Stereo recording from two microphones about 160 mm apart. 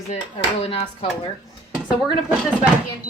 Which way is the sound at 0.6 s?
40° left (ahead or behind).